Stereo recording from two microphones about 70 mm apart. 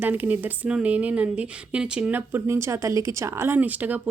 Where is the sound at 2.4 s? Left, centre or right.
Right.